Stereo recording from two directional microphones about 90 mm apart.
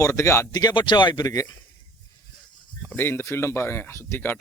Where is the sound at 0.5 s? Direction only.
55° left (ahead or behind).